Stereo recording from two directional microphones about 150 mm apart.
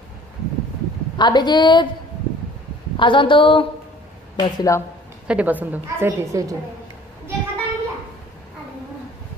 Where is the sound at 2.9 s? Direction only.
35° left (ahead or behind).